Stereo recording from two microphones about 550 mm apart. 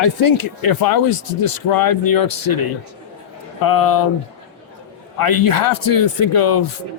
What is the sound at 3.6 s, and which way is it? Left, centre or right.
Speech, left.